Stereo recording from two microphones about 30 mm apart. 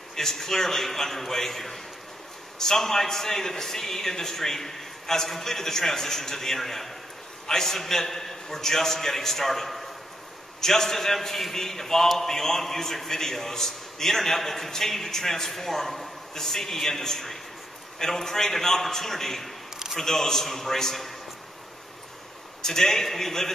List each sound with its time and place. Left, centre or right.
0.1 s a man's voice: centre
22.6 s a man's voice: centre